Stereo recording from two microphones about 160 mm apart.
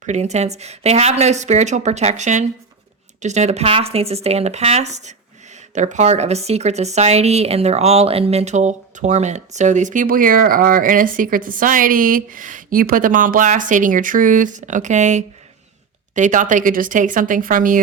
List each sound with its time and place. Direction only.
0.0 s a woman's voice: 45° right (ahead or behind)